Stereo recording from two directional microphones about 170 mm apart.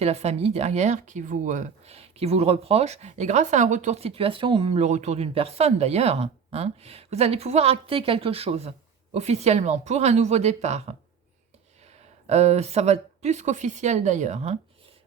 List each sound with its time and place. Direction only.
0.0 s speech: 40° right (ahead or behind)
12.3 s speech: 40° right (ahead or behind)